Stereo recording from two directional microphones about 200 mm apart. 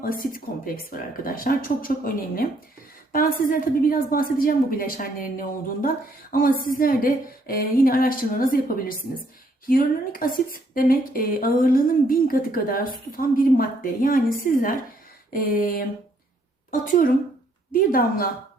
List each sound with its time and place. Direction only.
0.0 s a woman's voice: 45° left (ahead or behind)
3.1 s a woman's voice: 45° left (ahead or behind)
16.8 s a woman's voice: 40° left (ahead or behind)